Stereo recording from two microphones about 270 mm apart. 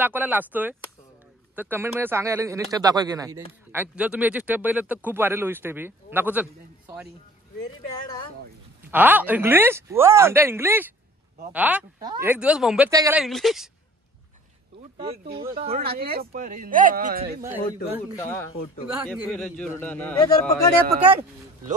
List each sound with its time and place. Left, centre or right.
0.0 s speech: centre
8.8 s a man's voice: centre
15.2 s speech: centre
15.8 s speech: right
18.2 s a man's voice: centre
21.1 s speech: right